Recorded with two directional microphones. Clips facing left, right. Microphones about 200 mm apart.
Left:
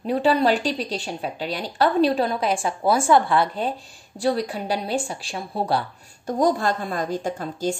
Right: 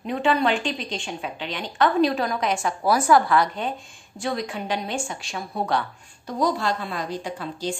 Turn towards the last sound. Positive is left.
turn(degrees=45)  # may be behind; listen again after turning